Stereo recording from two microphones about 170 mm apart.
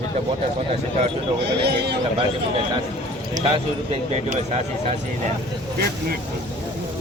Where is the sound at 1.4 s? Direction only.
75° right (ahead or behind).